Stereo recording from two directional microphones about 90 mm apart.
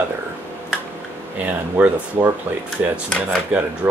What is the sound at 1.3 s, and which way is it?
Speech, 15° right (ahead or behind).